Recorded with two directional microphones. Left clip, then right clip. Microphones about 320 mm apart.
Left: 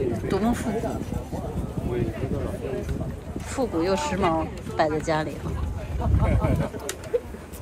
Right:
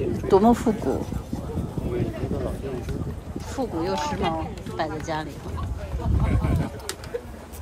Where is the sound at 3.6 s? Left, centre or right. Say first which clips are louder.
Left 2 dB; centre.